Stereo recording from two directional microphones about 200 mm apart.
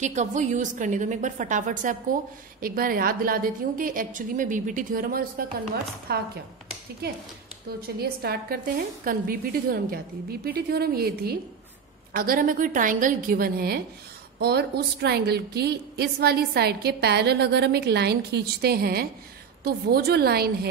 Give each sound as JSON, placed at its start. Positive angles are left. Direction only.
{"t": 0.0, "sound": "a woman's voice", "side_deg": -35}